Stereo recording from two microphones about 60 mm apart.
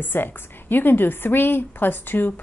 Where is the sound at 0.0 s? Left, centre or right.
Left.